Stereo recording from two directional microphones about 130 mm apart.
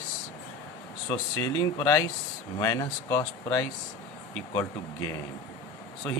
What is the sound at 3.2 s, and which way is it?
Speech, 10° left (ahead or behind).